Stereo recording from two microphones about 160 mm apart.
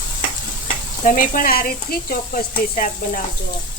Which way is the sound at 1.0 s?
55° left (ahead or behind).